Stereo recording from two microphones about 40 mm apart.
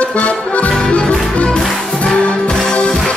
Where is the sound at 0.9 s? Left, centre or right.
Left.